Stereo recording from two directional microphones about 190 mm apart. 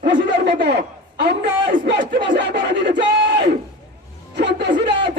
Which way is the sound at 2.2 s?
65° right (ahead or behind).